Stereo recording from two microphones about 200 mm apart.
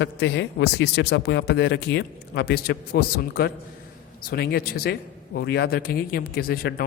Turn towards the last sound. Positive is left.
turn(degrees=50)  # may be behind; listen again after turning